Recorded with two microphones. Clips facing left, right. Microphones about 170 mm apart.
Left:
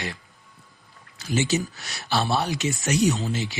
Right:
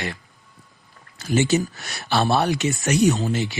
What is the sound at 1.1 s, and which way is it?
Speech, 55° right (ahead or behind).